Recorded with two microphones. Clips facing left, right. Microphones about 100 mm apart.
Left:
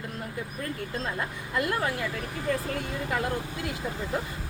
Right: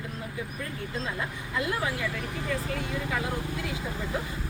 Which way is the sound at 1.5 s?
55° left (ahead or behind).